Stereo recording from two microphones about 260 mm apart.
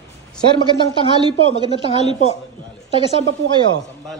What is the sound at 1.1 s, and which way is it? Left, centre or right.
Speech, centre.